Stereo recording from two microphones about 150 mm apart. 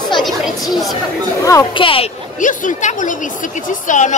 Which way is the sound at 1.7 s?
35° left (ahead or behind).